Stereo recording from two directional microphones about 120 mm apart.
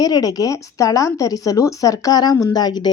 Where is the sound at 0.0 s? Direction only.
30° left (ahead or behind).